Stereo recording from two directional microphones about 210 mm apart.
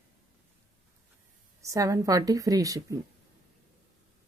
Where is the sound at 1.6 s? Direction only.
15° right (ahead or behind).